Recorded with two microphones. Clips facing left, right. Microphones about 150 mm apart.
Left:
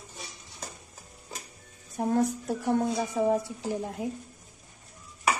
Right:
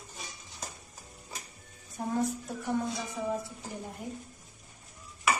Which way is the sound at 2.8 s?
65° left (ahead or behind).